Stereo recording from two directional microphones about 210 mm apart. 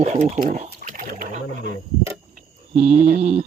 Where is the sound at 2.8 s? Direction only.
30° right (ahead or behind).